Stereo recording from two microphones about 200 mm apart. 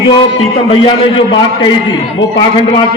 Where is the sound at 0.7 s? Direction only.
25° left (ahead or behind).